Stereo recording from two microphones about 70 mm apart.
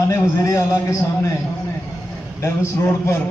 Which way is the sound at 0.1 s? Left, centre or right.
Left.